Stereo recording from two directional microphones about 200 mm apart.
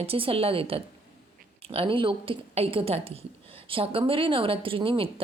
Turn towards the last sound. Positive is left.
turn(degrees=-25)  # may be behind; listen again after turning